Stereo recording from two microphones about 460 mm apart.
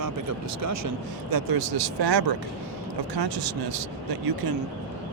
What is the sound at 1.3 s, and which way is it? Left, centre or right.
Speech, right.